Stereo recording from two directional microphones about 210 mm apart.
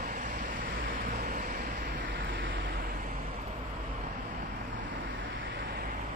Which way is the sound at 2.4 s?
65° right (ahead or behind).